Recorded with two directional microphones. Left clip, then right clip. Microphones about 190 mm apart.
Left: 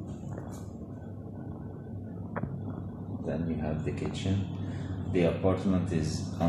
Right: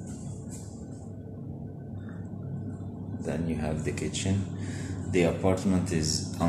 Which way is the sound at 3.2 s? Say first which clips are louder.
Right 2 dB; 20° right (ahead or behind).